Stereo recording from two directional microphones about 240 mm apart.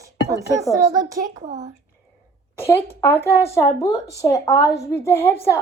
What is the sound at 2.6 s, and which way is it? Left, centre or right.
A woman's voice, centre.